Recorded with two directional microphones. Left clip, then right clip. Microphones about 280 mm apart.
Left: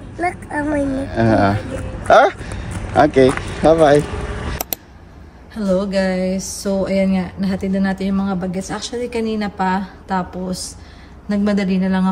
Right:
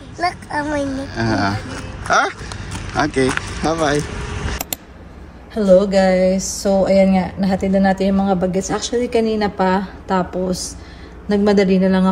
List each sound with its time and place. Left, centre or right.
0.2 s speech: right
0.9 s speech: centre
4.6 s a sound: centre
5.5 s speech: centre
11.2 s speech: centre